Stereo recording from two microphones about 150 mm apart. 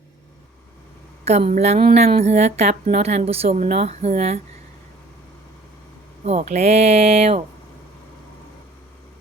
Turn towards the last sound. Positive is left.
turn(degrees=-40)  # may be behind; listen again after turning